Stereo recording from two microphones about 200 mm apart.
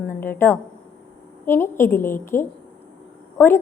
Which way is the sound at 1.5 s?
10° left (ahead or behind).